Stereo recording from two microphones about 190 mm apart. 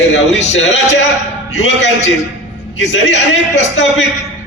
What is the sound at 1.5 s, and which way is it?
A man's voice, 70° left (ahead or behind).